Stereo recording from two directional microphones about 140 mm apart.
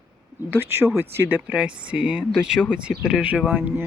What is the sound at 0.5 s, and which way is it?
Speech, 15° right (ahead or behind).